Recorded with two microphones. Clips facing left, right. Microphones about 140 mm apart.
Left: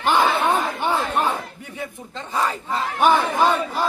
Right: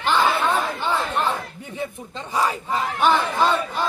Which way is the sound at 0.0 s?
15° left (ahead or behind).